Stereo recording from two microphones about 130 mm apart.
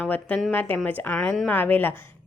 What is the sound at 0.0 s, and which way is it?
Speech, 10° left (ahead or behind).